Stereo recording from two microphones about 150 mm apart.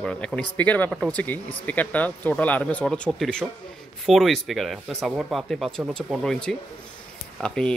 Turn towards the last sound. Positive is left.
turn(degrees=5)  # may be behind; listen again after turning